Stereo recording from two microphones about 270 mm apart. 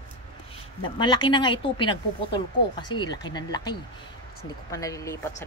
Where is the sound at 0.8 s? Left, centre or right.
Centre.